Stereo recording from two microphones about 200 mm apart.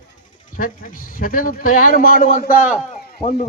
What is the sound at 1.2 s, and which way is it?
A man's voice, 45° left (ahead or behind).